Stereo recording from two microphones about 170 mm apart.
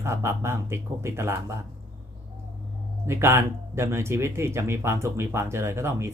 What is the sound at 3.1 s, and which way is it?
Speech, 15° right (ahead or behind).